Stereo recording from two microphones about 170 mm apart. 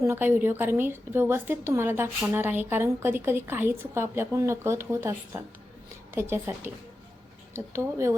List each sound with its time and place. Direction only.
0.0 s a woman's voice: 15° right (ahead or behind)